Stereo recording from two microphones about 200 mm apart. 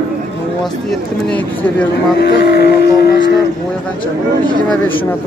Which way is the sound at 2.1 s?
55° left (ahead or behind).